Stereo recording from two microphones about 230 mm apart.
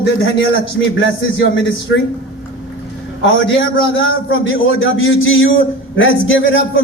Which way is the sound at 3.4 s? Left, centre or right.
Left.